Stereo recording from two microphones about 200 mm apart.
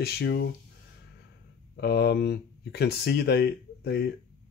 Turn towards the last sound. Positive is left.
turn(degrees=55)  # may be behind; listen again after turning